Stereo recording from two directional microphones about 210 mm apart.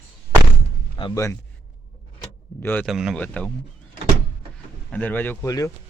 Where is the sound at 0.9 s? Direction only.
20° left (ahead or behind).